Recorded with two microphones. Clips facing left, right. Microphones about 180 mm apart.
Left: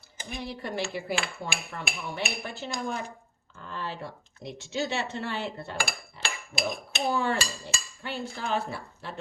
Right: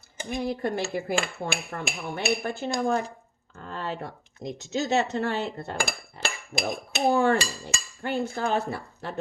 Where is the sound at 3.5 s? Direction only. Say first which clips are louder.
Right 3 dB; 45° right (ahead or behind).